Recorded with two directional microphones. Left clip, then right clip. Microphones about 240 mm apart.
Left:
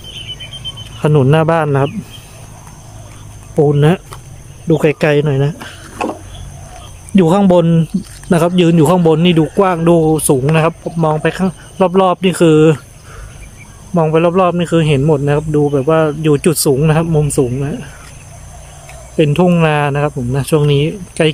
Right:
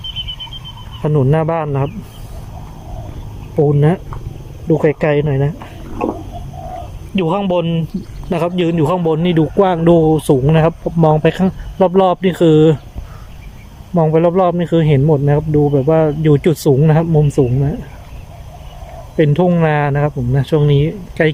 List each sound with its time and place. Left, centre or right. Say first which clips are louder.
1.0 s a man's voice: left 4 dB; centre
3.6 s a man's voice: left 2 dB; centre
7.2 s a man's voice: left 5 dB; centre
13.9 s speech: left 1 dB; centre
19.1 s a man's voice: left 1 dB; centre